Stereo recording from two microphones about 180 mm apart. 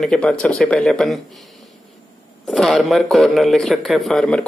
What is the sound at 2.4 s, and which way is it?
Speech, centre (ahead or behind).